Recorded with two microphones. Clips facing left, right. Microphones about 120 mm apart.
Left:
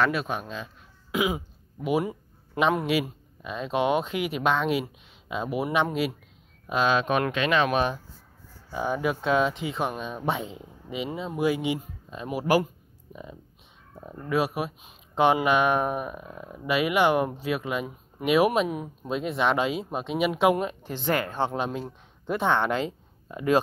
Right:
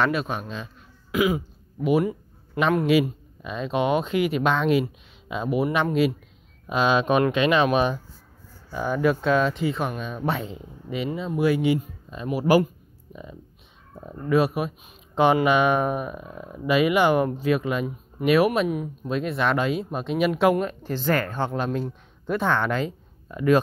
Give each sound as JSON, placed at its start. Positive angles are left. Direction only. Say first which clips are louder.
{"t": 0.0, "sound": "speech", "louder": "right 2 dB", "side_deg": 5}
{"t": 1.1, "sound": "throat clearing", "louder": "right 4 dB", "side_deg": 20}
{"t": 1.9, "sound": "speech", "louder": "right 4 dB", "side_deg": 15}
{"t": 2.9, "sound": "speech", "louder": "right 6 dB", "side_deg": 5}
{"t": 6.7, "sound": "speech", "louder": "right 3 dB", "side_deg": -5}
{"t": 8.7, "sound": "speech", "louder": "right 4 dB", "side_deg": 20}